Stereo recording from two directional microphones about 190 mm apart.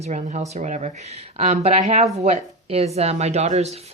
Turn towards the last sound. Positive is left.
turn(degrees=-35)  # may be behind; listen again after turning